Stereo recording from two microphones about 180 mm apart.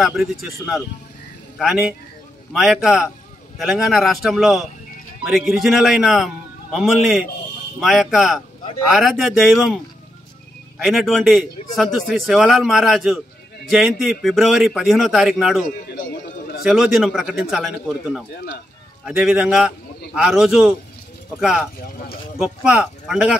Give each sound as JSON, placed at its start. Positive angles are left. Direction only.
{"t": 0.0, "sound": "a man's voice", "side_deg": 0}
{"t": 10.8, "sound": "a man's voice", "side_deg": 0}
{"t": 15.9, "sound": "a sound", "side_deg": 60}
{"t": 16.6, "sound": "a man's voice", "side_deg": 0}